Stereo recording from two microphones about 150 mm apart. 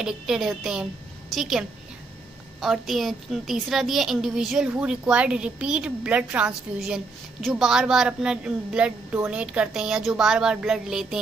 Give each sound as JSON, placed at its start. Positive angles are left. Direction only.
{"t": 0.0, "sound": "a woman's voice", "side_deg": -5}